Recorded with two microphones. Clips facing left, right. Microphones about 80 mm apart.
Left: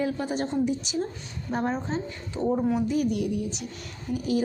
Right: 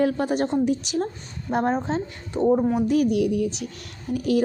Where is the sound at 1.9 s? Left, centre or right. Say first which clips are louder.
Right 4 dB; right.